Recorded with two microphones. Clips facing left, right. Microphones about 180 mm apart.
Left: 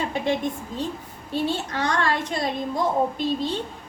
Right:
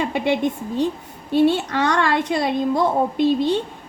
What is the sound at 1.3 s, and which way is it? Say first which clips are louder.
A child's voice: right 9 dB; 70° right (ahead or behind).